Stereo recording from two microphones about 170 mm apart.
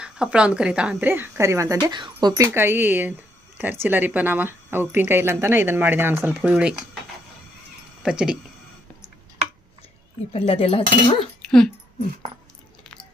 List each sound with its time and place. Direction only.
0.0 s a woman's voice: 5° right (ahead or behind)
8.0 s speech: 5° right (ahead or behind)
10.3 s speech: 35° left (ahead or behind)